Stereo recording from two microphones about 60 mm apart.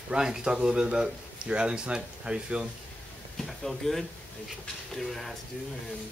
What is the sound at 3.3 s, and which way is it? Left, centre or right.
Speech, centre.